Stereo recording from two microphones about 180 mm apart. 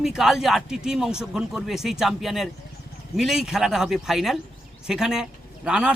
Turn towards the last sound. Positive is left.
turn(degrees=-5)  # may be behind; listen again after turning